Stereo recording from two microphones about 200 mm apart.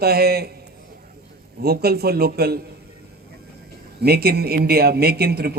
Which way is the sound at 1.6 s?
50° right (ahead or behind).